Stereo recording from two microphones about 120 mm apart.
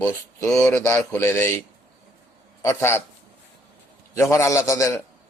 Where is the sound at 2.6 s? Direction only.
20° left (ahead or behind).